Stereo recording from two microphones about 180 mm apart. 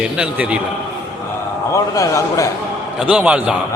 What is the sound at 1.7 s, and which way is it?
Speech, 15° left (ahead or behind).